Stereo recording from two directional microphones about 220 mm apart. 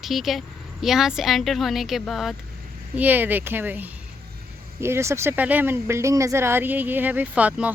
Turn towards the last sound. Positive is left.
turn(degrees=-5)  # may be behind; listen again after turning